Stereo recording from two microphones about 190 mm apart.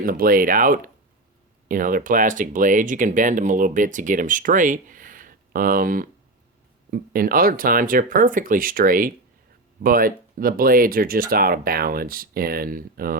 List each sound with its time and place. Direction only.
0.0 s speech: 50° right (ahead or behind)